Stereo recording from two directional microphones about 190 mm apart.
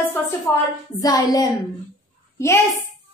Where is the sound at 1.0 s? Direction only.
20° left (ahead or behind).